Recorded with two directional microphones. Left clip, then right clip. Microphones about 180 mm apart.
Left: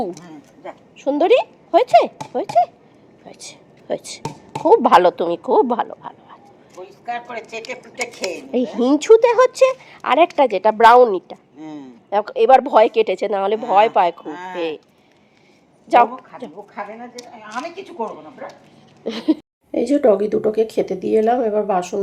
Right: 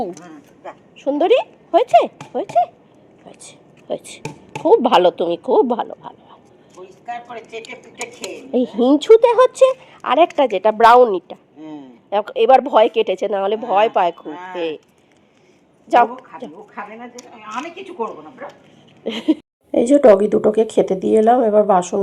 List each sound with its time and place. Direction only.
0.9 s speech: centre (ahead or behind)
3.8 s speech: 10° left (ahead or behind)
4.6 s speech: centre (ahead or behind)
6.8 s a sound: 30° left (ahead or behind)
7.2 s a woman's voice: 40° left (ahead or behind)
7.6 s a woman's voice: 10° right (ahead or behind)
11.6 s a man's voice: 75° left (ahead or behind)
12.1 s a woman's voice: 10° right (ahead or behind)
14.3 s speech: 80° left
14.5 s a woman's voice: 10° right (ahead or behind)
15.9 s a woman's voice: 10° right (ahead or behind)
16.7 s a woman's voice: 45° left (ahead or behind)
19.0 s speech: 10° right (ahead or behind)